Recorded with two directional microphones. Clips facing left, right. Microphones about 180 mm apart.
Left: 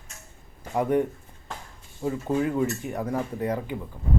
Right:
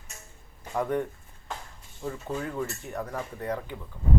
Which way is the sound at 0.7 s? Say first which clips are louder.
Left 5 dB; 15° left (ahead or behind).